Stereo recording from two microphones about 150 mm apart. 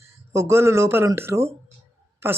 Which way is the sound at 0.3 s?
20° right (ahead or behind).